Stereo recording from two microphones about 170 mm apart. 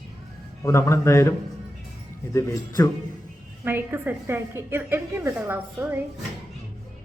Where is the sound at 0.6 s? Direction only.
15° left (ahead or behind).